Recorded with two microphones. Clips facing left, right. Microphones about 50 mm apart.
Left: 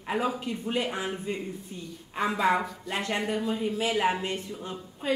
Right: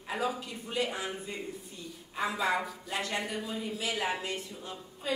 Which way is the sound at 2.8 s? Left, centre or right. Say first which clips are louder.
Left 4 dB; left.